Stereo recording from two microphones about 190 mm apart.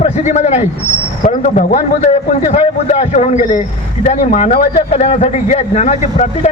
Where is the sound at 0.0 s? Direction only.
40° left (ahead or behind).